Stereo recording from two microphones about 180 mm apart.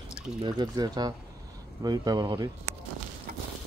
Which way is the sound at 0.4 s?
25° right (ahead or behind).